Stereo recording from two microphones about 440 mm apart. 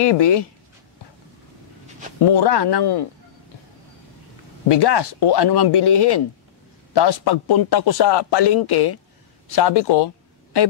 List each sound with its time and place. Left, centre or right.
0.0 s a man's voice: left
2.3 s a man's voice: left
4.6 s a man's voice: left